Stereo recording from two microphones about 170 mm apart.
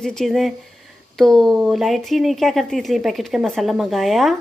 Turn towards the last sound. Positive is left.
turn(degrees=0)  # may be behind; listen again after turning